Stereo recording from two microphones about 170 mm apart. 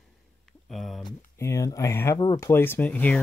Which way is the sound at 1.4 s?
20° left (ahead or behind).